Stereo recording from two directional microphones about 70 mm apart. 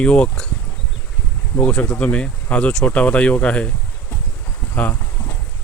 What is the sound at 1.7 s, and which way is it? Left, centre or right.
Speech, centre.